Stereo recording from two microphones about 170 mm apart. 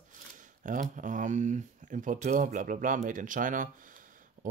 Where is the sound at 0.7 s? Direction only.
50° right (ahead or behind).